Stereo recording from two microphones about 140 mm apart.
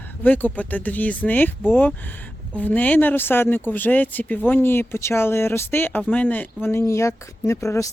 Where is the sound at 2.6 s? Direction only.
10° left (ahead or behind).